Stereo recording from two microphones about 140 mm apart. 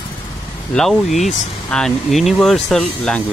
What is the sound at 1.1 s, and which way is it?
Speech, 55° left (ahead or behind).